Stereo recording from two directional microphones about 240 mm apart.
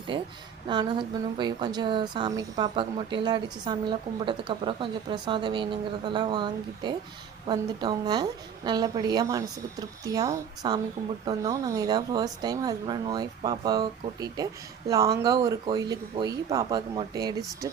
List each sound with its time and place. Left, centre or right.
0.1 s a woman's voice: centre